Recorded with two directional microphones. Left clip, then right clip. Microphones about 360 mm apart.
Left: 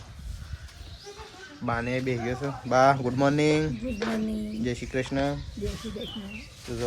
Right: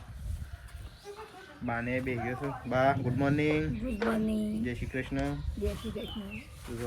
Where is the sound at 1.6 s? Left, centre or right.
Centre.